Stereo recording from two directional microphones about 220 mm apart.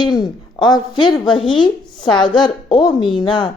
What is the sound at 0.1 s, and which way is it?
A woman's voice, 20° left (ahead or behind).